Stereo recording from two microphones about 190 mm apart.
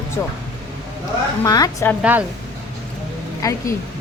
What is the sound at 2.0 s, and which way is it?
Speech, 5° right (ahead or behind).